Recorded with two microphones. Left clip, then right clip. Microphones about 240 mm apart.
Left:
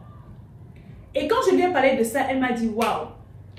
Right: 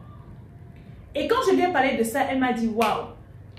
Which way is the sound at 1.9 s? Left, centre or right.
Centre.